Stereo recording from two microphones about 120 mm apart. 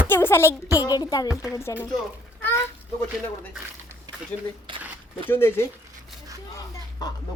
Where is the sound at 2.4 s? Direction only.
20° left (ahead or behind).